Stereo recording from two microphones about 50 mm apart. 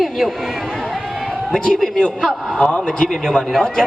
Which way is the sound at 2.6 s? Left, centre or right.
Left.